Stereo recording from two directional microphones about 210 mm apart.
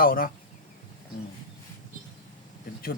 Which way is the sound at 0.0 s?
45° left (ahead or behind).